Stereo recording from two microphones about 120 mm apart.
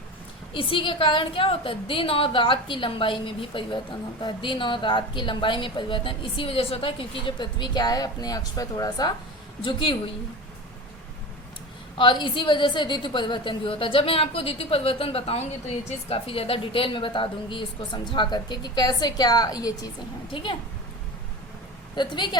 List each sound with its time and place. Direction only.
0.5 s a woman's voice: 45° left (ahead or behind)
9.6 s a woman's voice: 45° left (ahead or behind)
11.9 s a woman's voice: 40° left (ahead or behind)
20.3 s a woman's voice: 45° left (ahead or behind)
21.9 s a woman's voice: 40° left (ahead or behind)